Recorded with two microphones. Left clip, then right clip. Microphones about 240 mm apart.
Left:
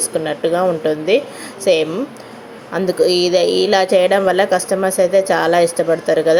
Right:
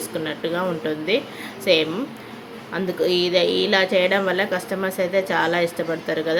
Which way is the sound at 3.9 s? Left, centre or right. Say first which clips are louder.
Left 7 dB; centre.